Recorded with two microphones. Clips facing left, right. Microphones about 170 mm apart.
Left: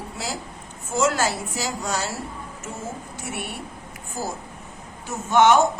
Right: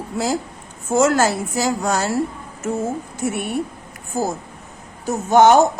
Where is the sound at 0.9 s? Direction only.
50° right (ahead or behind).